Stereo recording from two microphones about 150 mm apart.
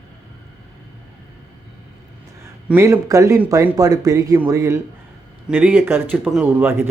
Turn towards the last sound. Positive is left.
turn(degrees=-15)  # may be behind; listen again after turning